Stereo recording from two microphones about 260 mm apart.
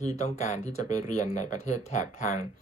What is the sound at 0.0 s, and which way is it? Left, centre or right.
Speech, left.